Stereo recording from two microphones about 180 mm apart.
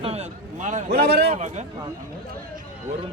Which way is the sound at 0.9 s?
60° right (ahead or behind).